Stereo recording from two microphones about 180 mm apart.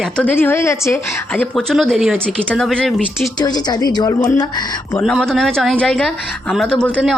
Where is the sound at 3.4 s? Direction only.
25° left (ahead or behind).